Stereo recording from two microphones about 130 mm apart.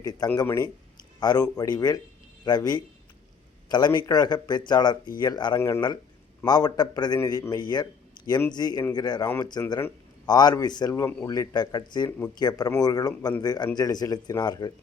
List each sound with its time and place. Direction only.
0.0 s a man's voice: 30° left (ahead or behind)